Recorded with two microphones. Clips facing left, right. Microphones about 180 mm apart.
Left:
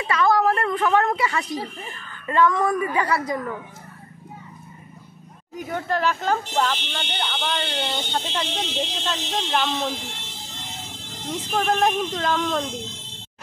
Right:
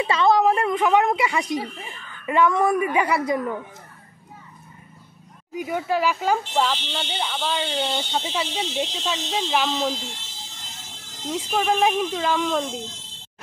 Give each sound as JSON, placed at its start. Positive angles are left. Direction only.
{"t": 0.0, "sound": "a sound", "side_deg": -25}
{"t": 2.2, "sound": "speech", "side_deg": -15}
{"t": 5.5, "sound": "speech", "side_deg": -10}
{"t": 9.9, "sound": "vehicle", "side_deg": 60}
{"t": 11.5, "sound": "speech", "side_deg": -5}